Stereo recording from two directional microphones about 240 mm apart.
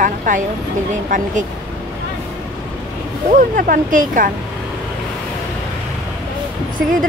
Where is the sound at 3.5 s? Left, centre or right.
Right.